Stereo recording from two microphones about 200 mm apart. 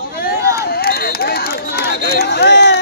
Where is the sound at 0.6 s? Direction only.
50° left (ahead or behind).